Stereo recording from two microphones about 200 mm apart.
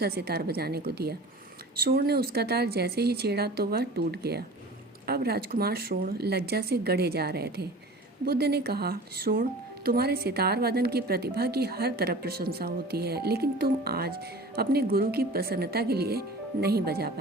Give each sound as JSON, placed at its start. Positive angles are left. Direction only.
{"t": 0.0, "sound": "speech", "side_deg": -50}